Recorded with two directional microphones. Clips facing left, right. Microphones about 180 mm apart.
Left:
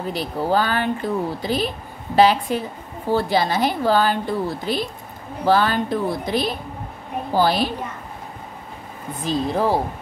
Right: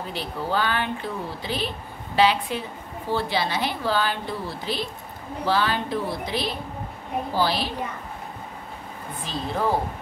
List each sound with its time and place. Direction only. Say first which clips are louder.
0.1 s a woman's voice: left 6 dB; 40° left (ahead or behind)
9.2 s speech: left 6 dB; 40° left (ahead or behind)